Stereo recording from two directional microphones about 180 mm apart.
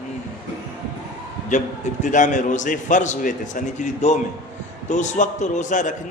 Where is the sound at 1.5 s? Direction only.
40° left (ahead or behind).